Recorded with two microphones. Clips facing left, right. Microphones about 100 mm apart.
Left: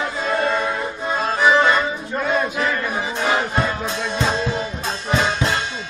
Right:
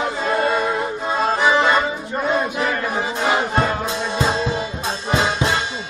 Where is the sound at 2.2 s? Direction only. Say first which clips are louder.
Right 1 dB; 25° right (ahead or behind).